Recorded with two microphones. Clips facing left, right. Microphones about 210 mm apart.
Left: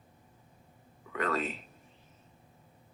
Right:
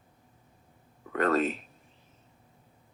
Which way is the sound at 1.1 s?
50° right (ahead or behind).